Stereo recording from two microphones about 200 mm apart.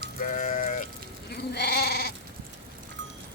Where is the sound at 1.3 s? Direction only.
55° left (ahead or behind).